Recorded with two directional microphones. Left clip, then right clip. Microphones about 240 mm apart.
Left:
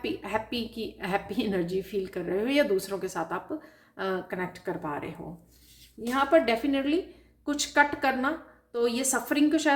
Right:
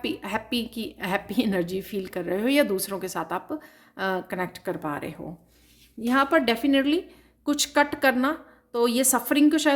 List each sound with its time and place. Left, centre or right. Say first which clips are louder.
0.0 s a woman's voice: right 1 dB; right